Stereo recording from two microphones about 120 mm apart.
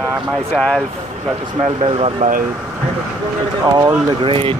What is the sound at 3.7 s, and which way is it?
Speech, 35° right (ahead or behind).